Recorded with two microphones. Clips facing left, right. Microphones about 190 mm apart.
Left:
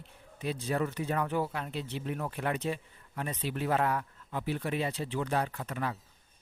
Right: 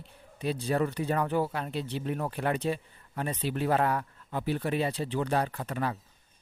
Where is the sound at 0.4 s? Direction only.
35° right (ahead or behind).